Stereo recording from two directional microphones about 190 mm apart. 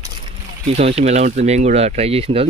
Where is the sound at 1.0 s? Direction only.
35° right (ahead or behind).